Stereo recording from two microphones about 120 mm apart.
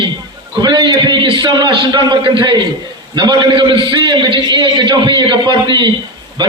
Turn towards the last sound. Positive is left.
turn(degrees=-40)  # may be behind; listen again after turning